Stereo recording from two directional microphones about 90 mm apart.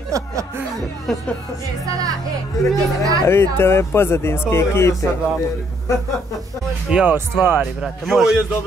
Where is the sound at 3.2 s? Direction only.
25° left (ahead or behind).